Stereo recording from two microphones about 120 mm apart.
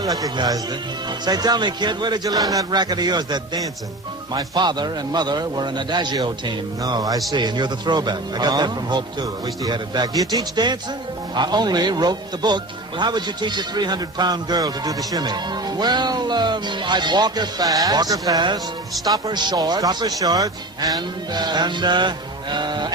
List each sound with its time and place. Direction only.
0.0 s a man's voice: 30° right (ahead or behind)